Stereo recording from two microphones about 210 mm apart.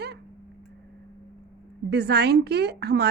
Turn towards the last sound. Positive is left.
turn(degrees=-50)  # may be behind; listen again after turning